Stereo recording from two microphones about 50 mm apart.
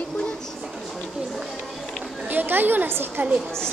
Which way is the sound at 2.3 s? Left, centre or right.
Right.